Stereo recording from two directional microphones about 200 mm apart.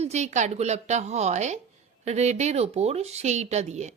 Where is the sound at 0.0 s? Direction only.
35° right (ahead or behind).